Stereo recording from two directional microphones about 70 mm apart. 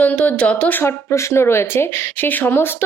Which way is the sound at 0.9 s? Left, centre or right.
Left.